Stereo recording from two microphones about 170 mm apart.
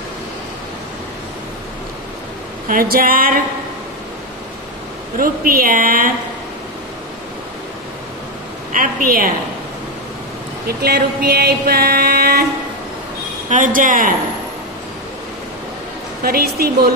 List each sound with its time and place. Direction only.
2.7 s a woman's voice: 60° right (ahead or behind)
5.2 s a woman's voice: 55° right (ahead or behind)
8.7 s a woman's voice: 55° right (ahead or behind)
10.8 s music: 70° right (ahead or behind)
13.5 s speech: 50° right (ahead or behind)
16.3 s a woman's voice: 65° right (ahead or behind)